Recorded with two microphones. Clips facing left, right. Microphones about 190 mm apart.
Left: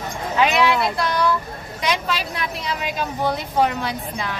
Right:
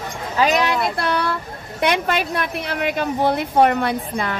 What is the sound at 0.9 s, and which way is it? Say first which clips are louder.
A woman's voice: left 1 dB; 60° right (ahead or behind).